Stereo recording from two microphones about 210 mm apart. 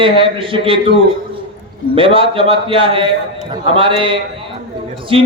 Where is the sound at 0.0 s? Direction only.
25° right (ahead or behind).